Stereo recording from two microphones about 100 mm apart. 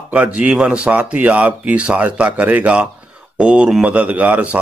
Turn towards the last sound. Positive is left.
turn(degrees=-15)  # may be behind; listen again after turning